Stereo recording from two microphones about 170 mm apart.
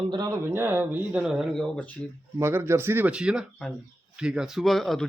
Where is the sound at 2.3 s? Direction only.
15° right (ahead or behind).